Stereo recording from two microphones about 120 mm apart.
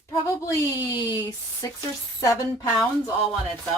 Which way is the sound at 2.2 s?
25° left (ahead or behind).